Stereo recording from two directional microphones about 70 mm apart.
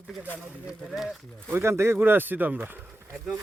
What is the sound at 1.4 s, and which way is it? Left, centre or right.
Speech, right.